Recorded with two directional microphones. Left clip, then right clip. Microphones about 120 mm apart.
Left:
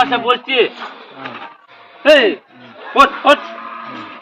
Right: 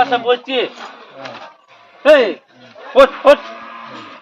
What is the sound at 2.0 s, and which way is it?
Speech, 30° right (ahead or behind).